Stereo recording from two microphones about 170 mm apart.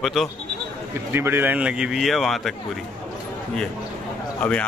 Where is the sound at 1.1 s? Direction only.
15° right (ahead or behind).